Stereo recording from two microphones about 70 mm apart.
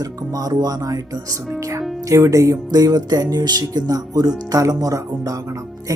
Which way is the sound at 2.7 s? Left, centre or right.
Right.